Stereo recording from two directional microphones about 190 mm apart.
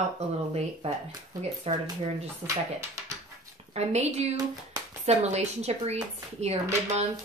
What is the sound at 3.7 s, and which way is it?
A woman's voice, 35° right (ahead or behind).